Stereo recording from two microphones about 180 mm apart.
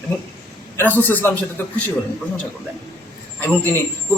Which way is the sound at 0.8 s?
10° left (ahead or behind).